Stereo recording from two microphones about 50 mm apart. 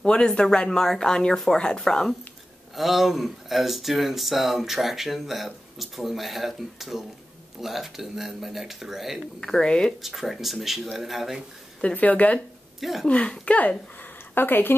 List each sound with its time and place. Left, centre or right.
0.0 s speech: centre
2.7 s speech: centre
9.4 s speech: centre
10.0 s speech: centre
11.9 s speech: left
12.8 s speech: centre
13.6 s speech: left
14.3 s speech: left